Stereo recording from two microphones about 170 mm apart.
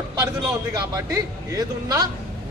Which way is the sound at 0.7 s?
20° right (ahead or behind).